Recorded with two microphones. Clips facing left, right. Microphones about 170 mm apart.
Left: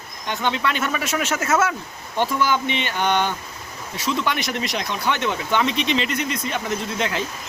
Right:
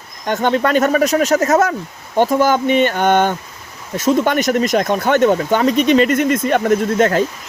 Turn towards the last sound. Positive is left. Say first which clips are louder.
# right 11 dB
turn(degrees=-50)  # may be behind; listen again after turning